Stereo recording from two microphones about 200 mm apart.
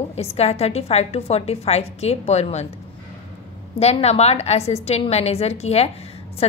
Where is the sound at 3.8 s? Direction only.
30° left (ahead or behind).